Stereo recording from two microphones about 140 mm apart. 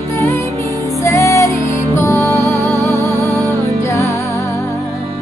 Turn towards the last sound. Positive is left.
turn(degrees=20)  # may be behind; listen again after turning